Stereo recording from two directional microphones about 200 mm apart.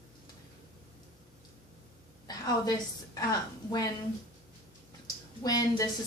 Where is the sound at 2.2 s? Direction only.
20° left (ahead or behind).